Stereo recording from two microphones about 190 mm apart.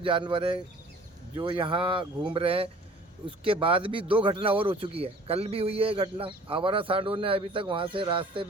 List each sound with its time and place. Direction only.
0.0 s speech: 25° right (ahead or behind)